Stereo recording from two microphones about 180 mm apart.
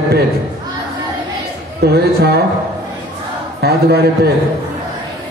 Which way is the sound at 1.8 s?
65° right (ahead or behind).